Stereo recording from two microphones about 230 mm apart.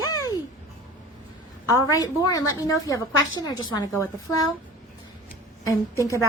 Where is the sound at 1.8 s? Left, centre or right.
Centre.